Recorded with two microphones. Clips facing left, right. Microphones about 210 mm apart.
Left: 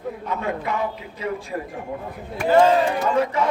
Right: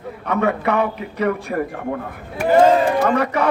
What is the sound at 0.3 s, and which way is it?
A man's voice, 70° right (ahead or behind).